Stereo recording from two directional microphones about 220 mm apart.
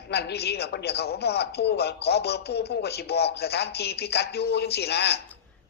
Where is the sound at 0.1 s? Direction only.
50° left (ahead or behind).